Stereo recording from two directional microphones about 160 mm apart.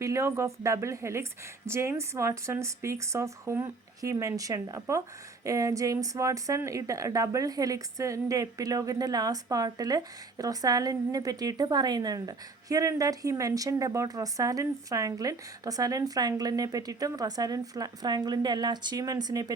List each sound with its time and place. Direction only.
0.0 s a woman's voice: 20° right (ahead or behind)